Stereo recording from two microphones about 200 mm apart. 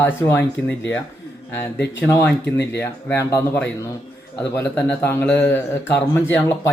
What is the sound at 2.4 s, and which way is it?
Speech, 60° left (ahead or behind).